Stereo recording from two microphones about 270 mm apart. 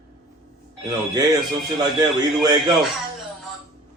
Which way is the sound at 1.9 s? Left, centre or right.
Centre.